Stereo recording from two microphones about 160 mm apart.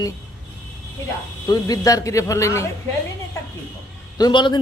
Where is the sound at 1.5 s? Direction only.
25° left (ahead or behind).